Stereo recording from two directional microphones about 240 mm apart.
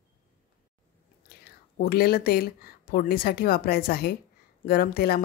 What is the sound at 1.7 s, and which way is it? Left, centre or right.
A woman's voice, left.